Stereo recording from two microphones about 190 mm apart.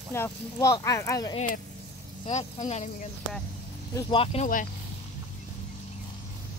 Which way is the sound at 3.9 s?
25° left (ahead or behind).